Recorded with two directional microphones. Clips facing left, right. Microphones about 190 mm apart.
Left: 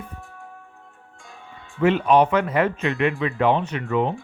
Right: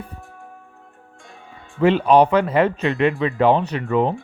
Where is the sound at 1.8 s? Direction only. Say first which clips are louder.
Right 3 dB; 30° right (ahead or behind).